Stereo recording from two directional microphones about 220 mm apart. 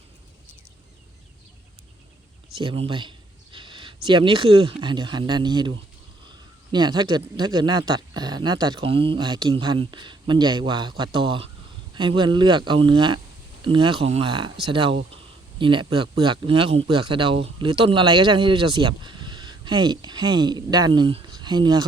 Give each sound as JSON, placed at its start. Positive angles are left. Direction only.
{"t": 2.6, "sound": "speech", "side_deg": -25}